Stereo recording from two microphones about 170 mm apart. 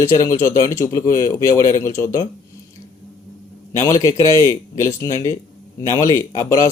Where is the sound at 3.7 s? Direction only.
15° left (ahead or behind).